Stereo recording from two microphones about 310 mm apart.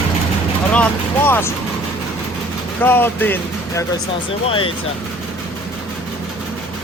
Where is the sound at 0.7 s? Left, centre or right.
Centre.